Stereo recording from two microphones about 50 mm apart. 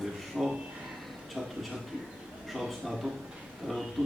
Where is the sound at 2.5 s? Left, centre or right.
Centre.